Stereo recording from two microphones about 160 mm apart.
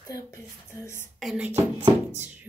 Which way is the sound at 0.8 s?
15° left (ahead or behind).